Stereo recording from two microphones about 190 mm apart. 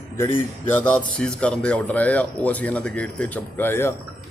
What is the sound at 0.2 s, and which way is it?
A man's voice, 10° left (ahead or behind).